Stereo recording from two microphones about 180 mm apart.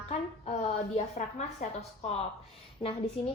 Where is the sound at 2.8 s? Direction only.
25° left (ahead or behind).